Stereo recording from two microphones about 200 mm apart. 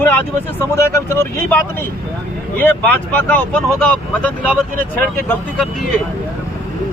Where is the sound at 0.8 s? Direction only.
10° left (ahead or behind).